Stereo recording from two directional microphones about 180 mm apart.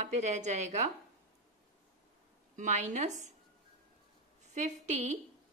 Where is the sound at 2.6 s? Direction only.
45° right (ahead or behind).